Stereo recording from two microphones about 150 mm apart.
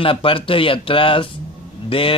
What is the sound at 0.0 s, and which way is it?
A man's voice, 35° left (ahead or behind).